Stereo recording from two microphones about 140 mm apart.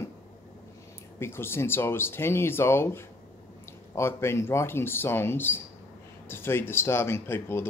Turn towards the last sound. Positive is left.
turn(degrees=15)  # may be behind; listen again after turning